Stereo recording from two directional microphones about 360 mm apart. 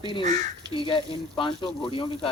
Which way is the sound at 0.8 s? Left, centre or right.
Centre.